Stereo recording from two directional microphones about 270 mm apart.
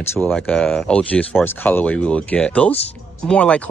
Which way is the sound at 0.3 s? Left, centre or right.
Centre.